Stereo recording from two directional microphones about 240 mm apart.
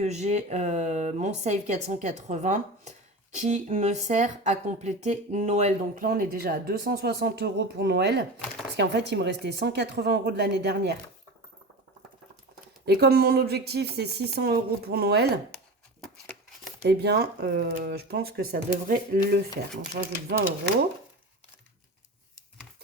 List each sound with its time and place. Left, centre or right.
0.0 s speech: right
12.8 s speech: right
16.8 s speech: right